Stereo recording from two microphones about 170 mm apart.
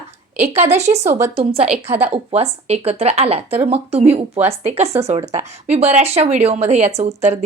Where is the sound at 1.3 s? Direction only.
35° right (ahead or behind).